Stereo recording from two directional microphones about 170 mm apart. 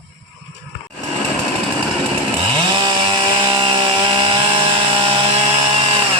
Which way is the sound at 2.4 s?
30° right (ahead or behind).